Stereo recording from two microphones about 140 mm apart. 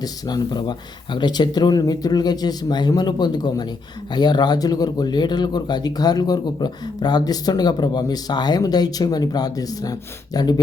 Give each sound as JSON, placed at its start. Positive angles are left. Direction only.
{"t": 0.0, "sound": "speech", "side_deg": 30}